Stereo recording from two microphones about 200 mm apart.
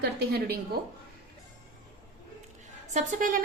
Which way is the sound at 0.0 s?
50° right (ahead or behind).